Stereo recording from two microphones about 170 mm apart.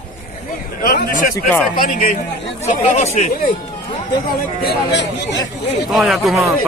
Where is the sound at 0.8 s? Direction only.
50° left (ahead or behind).